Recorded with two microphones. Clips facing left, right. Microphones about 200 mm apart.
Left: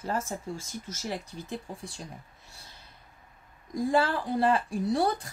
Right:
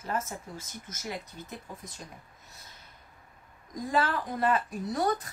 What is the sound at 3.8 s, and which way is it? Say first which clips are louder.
A woman's voice: left 3 dB; 30° left (ahead or behind).